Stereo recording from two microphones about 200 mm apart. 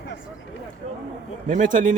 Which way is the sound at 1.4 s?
40° right (ahead or behind).